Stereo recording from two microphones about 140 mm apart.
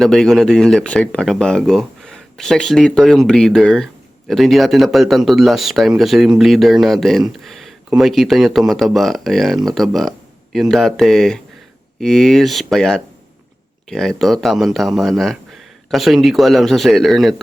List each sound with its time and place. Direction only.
0.0 s speech: centre (ahead or behind)